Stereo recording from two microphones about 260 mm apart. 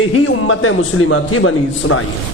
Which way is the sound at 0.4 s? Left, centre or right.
Left.